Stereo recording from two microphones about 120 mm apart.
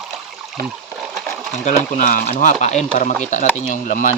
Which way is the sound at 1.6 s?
90° left.